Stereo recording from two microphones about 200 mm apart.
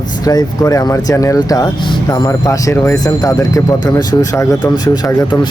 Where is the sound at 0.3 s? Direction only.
20° left (ahead or behind).